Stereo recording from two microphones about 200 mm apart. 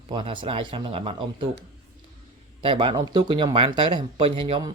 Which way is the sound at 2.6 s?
25° right (ahead or behind).